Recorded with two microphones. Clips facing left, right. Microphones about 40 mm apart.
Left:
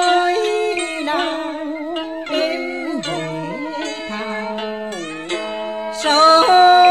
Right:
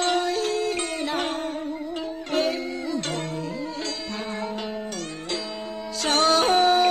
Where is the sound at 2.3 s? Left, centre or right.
Left.